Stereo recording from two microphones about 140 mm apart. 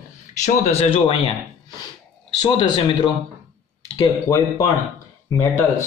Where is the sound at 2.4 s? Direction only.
30° left (ahead or behind).